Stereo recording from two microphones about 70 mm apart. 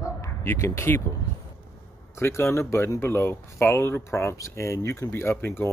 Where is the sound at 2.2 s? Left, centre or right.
Left.